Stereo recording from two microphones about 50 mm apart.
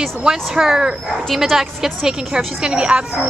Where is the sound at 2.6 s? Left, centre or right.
Centre.